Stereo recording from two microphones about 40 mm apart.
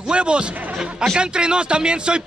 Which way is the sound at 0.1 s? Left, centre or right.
Right.